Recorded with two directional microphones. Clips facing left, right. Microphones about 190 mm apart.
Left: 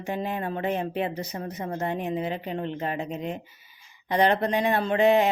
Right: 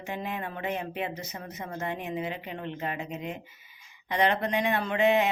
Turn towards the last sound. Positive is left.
turn(degrees=35)  # may be behind; listen again after turning